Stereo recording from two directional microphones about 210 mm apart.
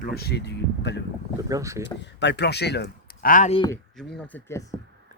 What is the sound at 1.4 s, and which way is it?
Speech, 15° right (ahead or behind).